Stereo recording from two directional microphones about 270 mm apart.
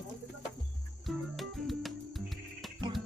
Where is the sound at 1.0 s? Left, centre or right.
Centre.